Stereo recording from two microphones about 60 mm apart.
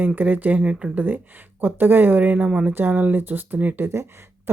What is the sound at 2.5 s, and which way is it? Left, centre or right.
Speech, centre.